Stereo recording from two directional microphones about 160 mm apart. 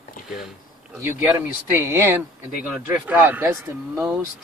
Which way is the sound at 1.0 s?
10° right (ahead or behind).